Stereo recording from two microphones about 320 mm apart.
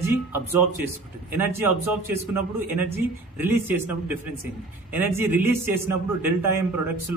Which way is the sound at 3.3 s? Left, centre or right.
Centre.